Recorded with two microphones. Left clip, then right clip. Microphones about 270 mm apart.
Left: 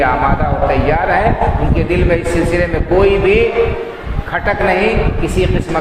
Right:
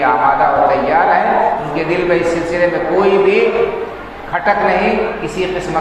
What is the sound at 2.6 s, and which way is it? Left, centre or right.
Speech, left.